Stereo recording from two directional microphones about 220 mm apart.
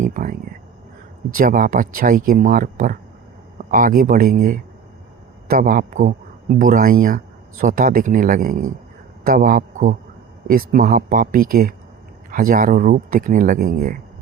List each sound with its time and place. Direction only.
0.0 s speech: 35° right (ahead or behind)
1.4 s speech: 40° right (ahead or behind)